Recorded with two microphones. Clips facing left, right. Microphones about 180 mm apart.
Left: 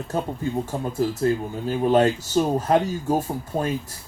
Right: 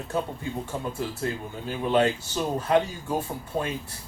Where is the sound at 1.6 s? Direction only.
40° left (ahead or behind).